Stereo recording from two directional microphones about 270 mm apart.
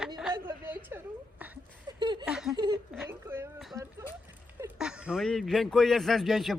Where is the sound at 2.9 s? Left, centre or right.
Centre.